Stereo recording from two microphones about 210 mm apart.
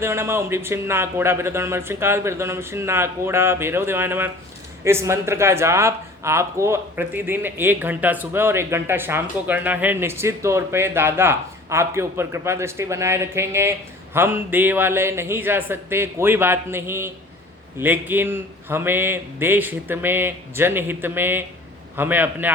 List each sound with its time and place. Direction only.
0.0 s speech: 10° right (ahead or behind)